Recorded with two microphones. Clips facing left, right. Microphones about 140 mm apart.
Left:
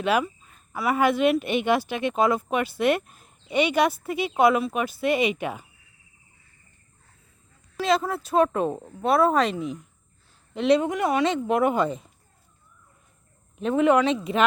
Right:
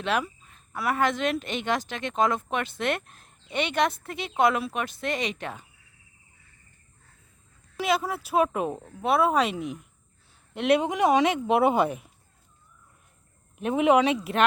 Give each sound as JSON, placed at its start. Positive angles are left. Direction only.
{"t": 0.0, "sound": "speech", "side_deg": 5}
{"t": 7.8, "sound": "a woman's voice", "side_deg": -5}
{"t": 10.8, "sound": "speech", "side_deg": -20}
{"t": 13.6, "sound": "speech", "side_deg": -15}